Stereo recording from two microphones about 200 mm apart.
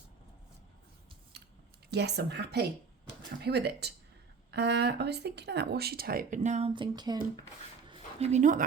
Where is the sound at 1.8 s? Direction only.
55° right (ahead or behind); by 7.1 s 20° right (ahead or behind).